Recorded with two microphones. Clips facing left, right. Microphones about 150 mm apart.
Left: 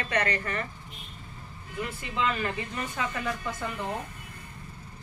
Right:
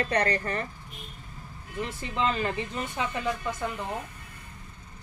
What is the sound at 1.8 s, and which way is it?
Speech, 30° right (ahead or behind).